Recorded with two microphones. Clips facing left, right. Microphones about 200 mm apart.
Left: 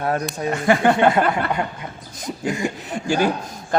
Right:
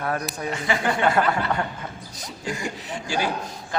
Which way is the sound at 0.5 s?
55° left (ahead or behind).